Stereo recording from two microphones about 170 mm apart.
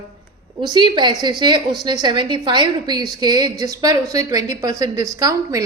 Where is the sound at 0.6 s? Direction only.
25° right (ahead or behind).